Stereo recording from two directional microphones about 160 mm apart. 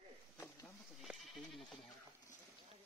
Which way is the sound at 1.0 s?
Centre (ahead or behind).